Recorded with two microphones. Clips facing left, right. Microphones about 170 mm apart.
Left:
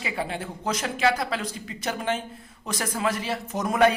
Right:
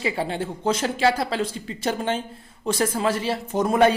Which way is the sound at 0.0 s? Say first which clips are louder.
Right 5 dB; 30° right (ahead or behind).